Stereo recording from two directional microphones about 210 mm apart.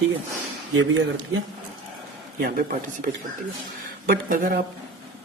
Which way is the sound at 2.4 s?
40° right (ahead or behind).